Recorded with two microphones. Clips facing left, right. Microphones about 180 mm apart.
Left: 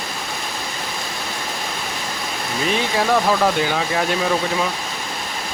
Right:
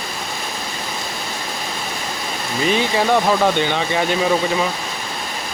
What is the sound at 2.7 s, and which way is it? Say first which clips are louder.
Speech: right 2 dB; centre (ahead or behind).